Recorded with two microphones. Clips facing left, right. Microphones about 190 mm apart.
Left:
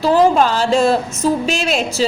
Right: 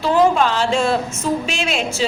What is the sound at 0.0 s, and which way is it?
A woman's voice, 40° left (ahead or behind).